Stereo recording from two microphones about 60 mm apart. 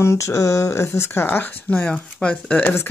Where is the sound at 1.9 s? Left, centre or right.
Centre.